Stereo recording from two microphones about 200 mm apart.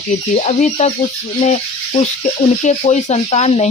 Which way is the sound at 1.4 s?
35° left (ahead or behind).